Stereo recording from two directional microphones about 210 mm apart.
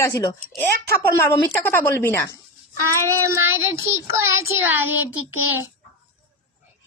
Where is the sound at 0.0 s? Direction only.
15° left (ahead or behind).